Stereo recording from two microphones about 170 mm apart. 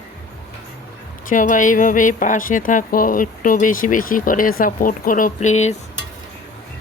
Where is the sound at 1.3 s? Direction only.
50° left (ahead or behind).